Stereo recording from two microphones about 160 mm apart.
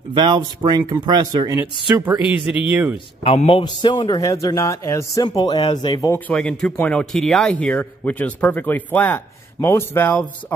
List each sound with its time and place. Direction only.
0.1 s speech: 30° right (ahead or behind); by 3.0 s 10° right (ahead or behind)
3.3 s a man's voice: 35° left (ahead or behind)
6.1 s speech: 10° left (ahead or behind)